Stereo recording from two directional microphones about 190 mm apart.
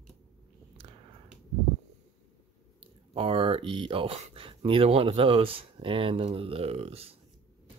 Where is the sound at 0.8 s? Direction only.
25° right (ahead or behind).